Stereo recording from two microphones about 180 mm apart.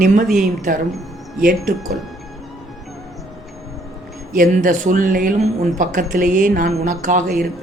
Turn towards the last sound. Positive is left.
turn(degrees=-45)  # may be behind; listen again after turning